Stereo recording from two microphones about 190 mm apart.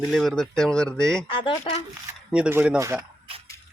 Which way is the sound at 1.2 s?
25° left (ahead or behind).